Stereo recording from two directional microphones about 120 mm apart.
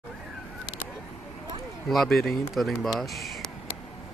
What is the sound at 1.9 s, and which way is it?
Speech, centre (ahead or behind).